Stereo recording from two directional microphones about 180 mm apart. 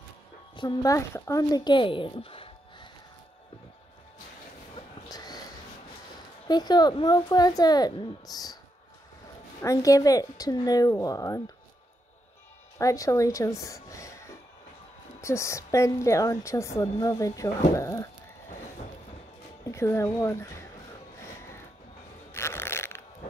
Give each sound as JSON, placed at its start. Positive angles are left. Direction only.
{"t": 0.6, "sound": "speech", "side_deg": 20}
{"t": 4.7, "sound": "a sound", "side_deg": 20}
{"t": 6.4, "sound": "speech", "side_deg": 25}
{"t": 9.6, "sound": "speech", "side_deg": 20}
{"t": 12.7, "sound": "a woman's voice", "side_deg": 20}
{"t": 15.2, "sound": "a woman's voice", "side_deg": 15}
{"t": 19.6, "sound": "a woman's voice", "side_deg": 15}
{"t": 22.3, "sound": "burping", "side_deg": 15}